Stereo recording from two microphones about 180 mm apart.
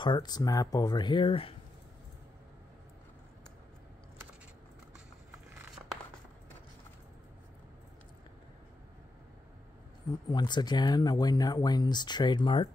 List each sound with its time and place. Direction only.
0.0 s speech: 25° left (ahead or behind)
10.3 s speech: 25° left (ahead or behind)